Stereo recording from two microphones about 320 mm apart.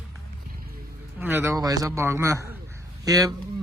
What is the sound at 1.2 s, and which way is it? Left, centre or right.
A man's voice, centre.